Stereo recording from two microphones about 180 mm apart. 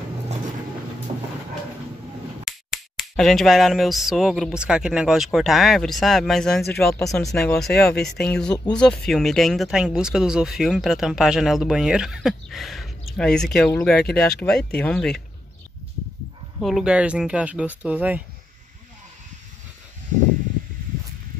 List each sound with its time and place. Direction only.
2.4 s speech: centre (ahead or behind)
8.5 s speech: 25° left (ahead or behind)
8.8 s speech: 5° left (ahead or behind)
16.6 s speech: 5° right (ahead or behind)